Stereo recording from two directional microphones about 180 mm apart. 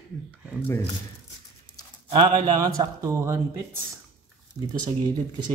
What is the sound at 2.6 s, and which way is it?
Speech, 20° right (ahead or behind).